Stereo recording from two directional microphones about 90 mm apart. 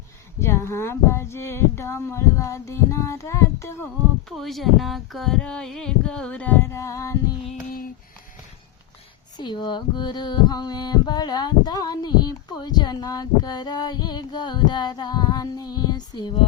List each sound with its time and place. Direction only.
0.3 s speech: 30° left (ahead or behind)
4.3 s speech: centre (ahead or behind); by 7.3 s 35° left (ahead or behind)
9.4 s a sound: 60° left (ahead or behind)